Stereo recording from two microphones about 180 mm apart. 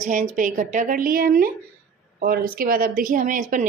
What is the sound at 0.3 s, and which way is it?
A woman's voice, 45° right (ahead or behind).